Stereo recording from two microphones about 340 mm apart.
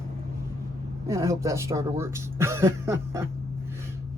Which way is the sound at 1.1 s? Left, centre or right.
Centre.